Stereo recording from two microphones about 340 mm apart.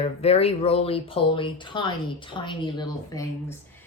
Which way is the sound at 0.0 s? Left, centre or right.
Centre.